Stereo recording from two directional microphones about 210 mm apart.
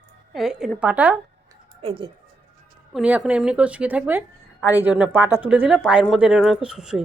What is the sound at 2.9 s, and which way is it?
Speech, 5° right (ahead or behind).